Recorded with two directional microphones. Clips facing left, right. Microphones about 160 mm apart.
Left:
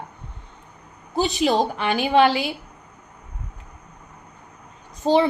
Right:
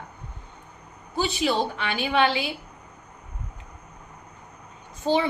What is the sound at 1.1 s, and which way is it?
A woman's voice, 40° left (ahead or behind).